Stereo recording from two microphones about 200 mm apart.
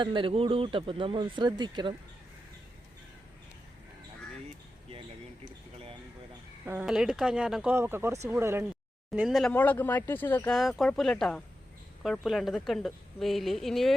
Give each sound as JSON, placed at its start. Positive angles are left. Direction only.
{"t": 0.0, "sound": "speech", "side_deg": -25}
{"t": 6.7, "sound": "speech", "side_deg": -5}
{"t": 9.1, "sound": "speech", "side_deg": 0}